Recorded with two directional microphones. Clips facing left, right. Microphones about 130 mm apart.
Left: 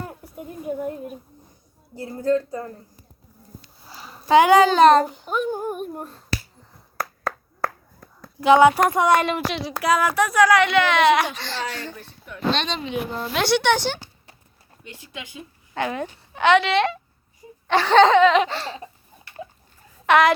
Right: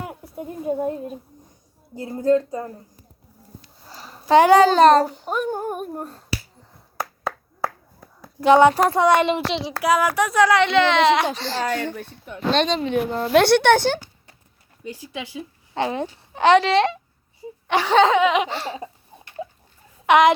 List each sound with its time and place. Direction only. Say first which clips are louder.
0.0 s a sound: right 3 dB; 20° right (ahead or behind)
2.0 s a child's voice: right 3 dB; 20° right (ahead or behind)
3.8 s speech: right 1 dB; 40° right (ahead or behind)
6.9 s finger snapping: even; centre (ahead or behind)
8.4 s a child's voice: even; 35° right (ahead or behind)
9.8 s a child's voice: right 1 dB; 10° right (ahead or behind); by 11.6 s 35° right (ahead or behind)
11.6 s speech: right 6 dB; 55° right (ahead or behind)
12.5 s speech: right 4 dB; 45° right (ahead or behind)
14.8 s a woman's voice: right 7 dB; 35° right (ahead or behind)
17.7 s laughter: left 2 dB; 10° right (ahead or behind)
20.1 s speech: right 2 dB; 20° right (ahead or behind)